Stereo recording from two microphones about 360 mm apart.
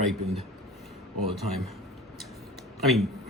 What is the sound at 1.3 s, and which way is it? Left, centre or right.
Speech, centre.